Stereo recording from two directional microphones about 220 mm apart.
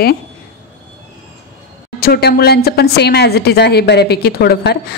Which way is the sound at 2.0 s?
45° left (ahead or behind).